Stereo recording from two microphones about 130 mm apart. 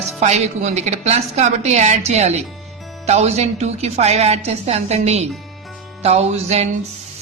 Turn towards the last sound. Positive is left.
turn(degrees=-55)  # may be behind; listen again after turning